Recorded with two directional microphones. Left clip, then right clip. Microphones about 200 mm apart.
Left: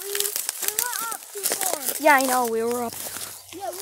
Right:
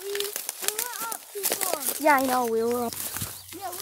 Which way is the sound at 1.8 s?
10° left (ahead or behind).